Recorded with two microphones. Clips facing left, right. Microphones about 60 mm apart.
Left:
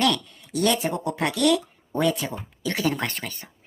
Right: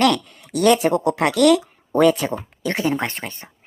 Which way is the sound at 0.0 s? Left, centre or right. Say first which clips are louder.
Right 5 dB; right.